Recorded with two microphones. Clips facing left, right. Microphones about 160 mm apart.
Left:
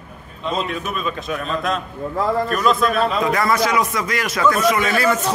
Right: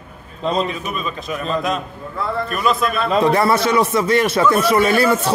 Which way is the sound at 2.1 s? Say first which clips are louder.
Left 3 dB; 40° left (ahead or behind).